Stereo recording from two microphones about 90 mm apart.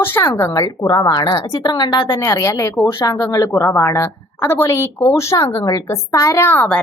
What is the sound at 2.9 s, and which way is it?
A woman's voice, 45° left (ahead or behind).